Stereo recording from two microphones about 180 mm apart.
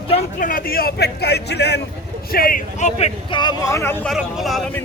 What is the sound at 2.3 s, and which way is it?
Speech, 55° left (ahead or behind).